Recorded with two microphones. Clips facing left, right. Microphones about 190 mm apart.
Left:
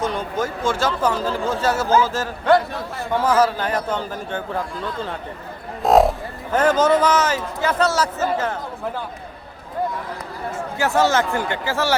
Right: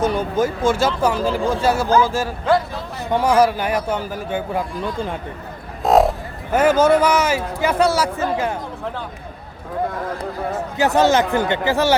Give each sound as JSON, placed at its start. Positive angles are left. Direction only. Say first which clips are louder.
{"t": 0.0, "sound": "a man's voice", "louder": "right 5 dB", "side_deg": -10}
{"t": 5.8, "sound": "speech", "louder": "even", "side_deg": 0}
{"t": 10.8, "sound": "a man's voice", "louder": "right 3 dB", "side_deg": -20}